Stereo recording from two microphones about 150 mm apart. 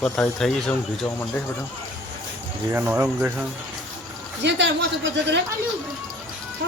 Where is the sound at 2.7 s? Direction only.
15° right (ahead or behind).